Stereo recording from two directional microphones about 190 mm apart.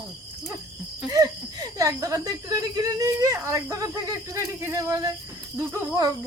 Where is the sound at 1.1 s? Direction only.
20° right (ahead or behind).